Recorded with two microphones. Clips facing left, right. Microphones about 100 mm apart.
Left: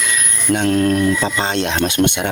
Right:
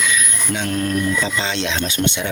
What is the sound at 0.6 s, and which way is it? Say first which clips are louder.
Speech: left 6 dB; 75° left (ahead or behind).